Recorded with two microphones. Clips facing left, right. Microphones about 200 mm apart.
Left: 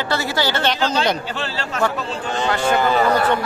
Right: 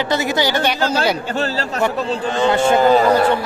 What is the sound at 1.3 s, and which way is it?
Speech, 40° right (ahead or behind).